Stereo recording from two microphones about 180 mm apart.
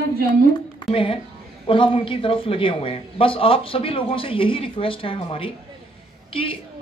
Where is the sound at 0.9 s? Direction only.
30° left (ahead or behind).